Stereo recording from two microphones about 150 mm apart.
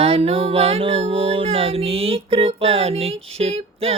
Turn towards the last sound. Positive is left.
turn(degrees=-45)  # may be behind; listen again after turning